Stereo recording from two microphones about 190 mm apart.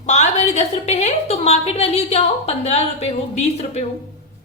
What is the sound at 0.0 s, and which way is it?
A woman's voice, 35° left (ahead or behind).